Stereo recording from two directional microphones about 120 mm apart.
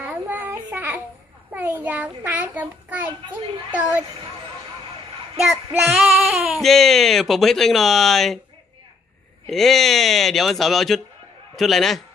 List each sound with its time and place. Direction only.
0.0 s child singing: 15° right (ahead or behind)
1.5 s a child's voice: 15° right (ahead or behind)
5.4 s speech: centre (ahead or behind)
9.5 s speech: centre (ahead or behind)